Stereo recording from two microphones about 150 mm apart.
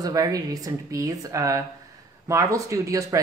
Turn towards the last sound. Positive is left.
turn(degrees=-20)  # may be behind; listen again after turning